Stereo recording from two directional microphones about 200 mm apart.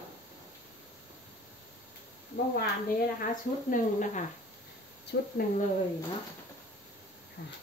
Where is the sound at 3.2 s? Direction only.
40° left (ahead or behind).